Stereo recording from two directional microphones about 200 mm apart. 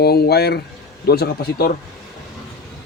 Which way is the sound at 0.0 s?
50° left (ahead or behind).